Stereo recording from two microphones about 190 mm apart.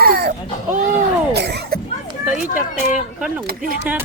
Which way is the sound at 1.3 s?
60° right (ahead or behind).